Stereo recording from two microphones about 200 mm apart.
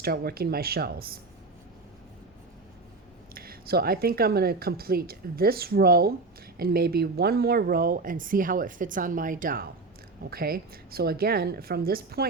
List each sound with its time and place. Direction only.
0.0 s speech: 50° right (ahead or behind)
3.3 s speech: 50° right (ahead or behind)